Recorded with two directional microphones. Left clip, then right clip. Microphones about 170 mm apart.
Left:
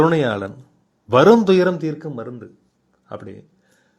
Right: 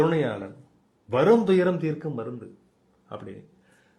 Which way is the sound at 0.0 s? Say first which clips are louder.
Left 7 dB; 30° left (ahead or behind).